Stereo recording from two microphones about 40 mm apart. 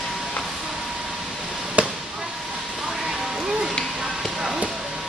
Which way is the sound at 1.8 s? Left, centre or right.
Right.